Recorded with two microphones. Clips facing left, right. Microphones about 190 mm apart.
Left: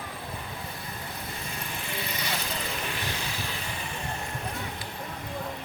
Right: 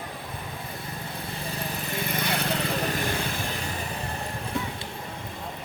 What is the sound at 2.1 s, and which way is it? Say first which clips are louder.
Vehicle: right 8 dB; 55° right (ahead or behind).